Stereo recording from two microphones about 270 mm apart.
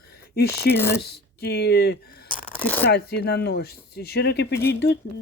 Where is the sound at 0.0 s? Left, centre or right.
Left.